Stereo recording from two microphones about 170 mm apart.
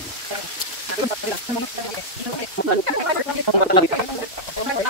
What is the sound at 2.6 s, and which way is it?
Speech, 75° left (ahead or behind).